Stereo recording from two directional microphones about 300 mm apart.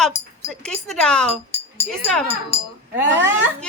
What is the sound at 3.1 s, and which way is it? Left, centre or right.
Speech, centre.